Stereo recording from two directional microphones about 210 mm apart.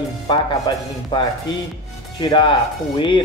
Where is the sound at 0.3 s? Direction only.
20° left (ahead or behind).